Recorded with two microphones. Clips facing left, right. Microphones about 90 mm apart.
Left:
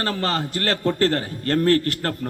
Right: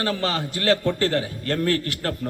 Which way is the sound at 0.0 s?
40° left (ahead or behind).